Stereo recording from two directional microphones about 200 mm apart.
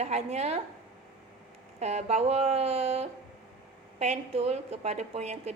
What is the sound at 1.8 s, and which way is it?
A woman's voice, 35° right (ahead or behind).